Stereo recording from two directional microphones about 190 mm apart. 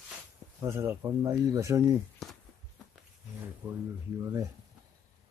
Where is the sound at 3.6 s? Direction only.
5° right (ahead or behind).